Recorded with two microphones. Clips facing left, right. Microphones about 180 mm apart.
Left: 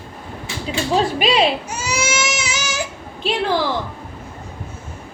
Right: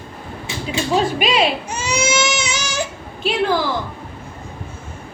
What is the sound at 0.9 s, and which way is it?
Speech, 35° left (ahead or behind).